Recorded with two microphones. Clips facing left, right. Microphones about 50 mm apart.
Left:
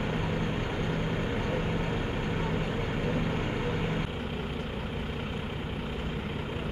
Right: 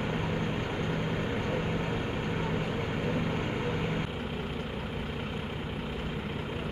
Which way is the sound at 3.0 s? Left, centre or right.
Centre.